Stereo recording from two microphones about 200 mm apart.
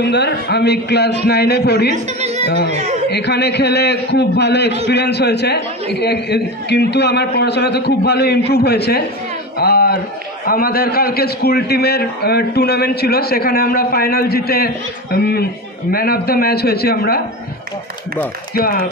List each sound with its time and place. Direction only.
0.0 s a man's voice: 55° left (ahead or behind)
2.1 s chatter: 30° right (ahead or behind)
2.4 s speech: 55° left (ahead or behind)
2.7 s speech: 30° right (ahead or behind)
3.1 s a man's voice: 60° left (ahead or behind)
9.6 s a sound: 50° left (ahead or behind)
10.4 s a man's voice: 50° left (ahead or behind)
18.5 s a man's voice: 50° left (ahead or behind)